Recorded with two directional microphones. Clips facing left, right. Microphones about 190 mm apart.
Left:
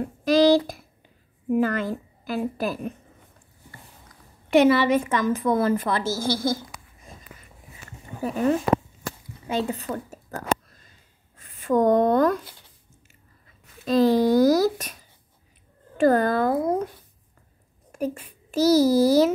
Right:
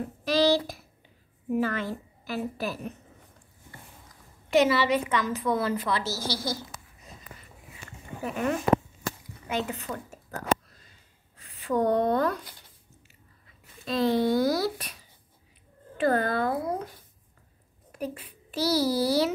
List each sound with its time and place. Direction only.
0.2 s a sound: 50° left (ahead or behind)
1.6 s a woman's voice: 45° left (ahead or behind)
4.5 s a woman's voice: 55° left (ahead or behind)
8.2 s a child's voice: 35° left (ahead or behind)
11.3 s speech: 50° left (ahead or behind)
13.8 s a child's voice: 40° left (ahead or behind)
16.0 s a woman's voice: 45° left (ahead or behind)
17.9 s a child's voice: 45° left (ahead or behind)